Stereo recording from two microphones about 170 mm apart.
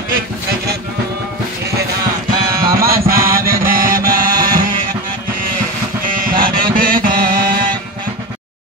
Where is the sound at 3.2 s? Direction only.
55° right (ahead or behind).